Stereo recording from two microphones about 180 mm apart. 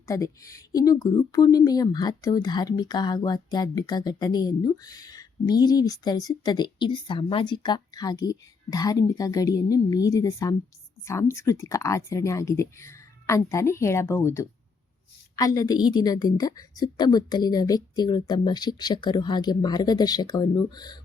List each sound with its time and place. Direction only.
0.1 s speech: 20° left (ahead or behind)